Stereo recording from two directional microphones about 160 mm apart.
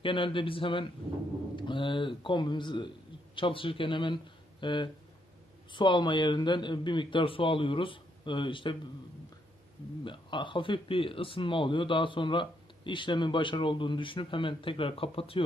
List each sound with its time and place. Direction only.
0.0 s speech: 30° left (ahead or behind)
10.0 s speech: 30° left (ahead or behind)